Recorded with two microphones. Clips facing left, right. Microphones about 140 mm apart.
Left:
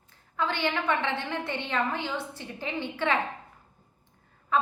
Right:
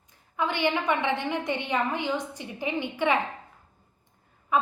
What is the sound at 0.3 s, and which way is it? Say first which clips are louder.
A woman's voice: right 2 dB; 15° right (ahead or behind).